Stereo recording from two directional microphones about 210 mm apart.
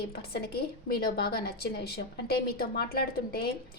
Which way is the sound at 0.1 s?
45° left (ahead or behind).